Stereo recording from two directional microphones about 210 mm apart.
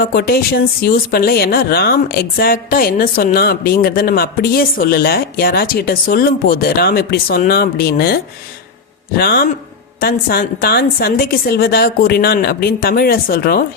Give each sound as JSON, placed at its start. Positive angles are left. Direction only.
{"t": 0.0, "sound": "speech", "side_deg": 45}